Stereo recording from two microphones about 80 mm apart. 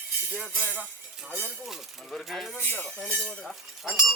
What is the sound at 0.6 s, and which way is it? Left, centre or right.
Speech, centre.